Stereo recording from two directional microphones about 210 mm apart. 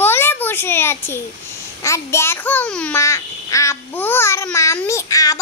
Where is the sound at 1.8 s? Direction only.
15° left (ahead or behind).